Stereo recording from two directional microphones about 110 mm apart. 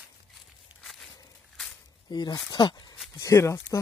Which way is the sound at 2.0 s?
40° left (ahead or behind).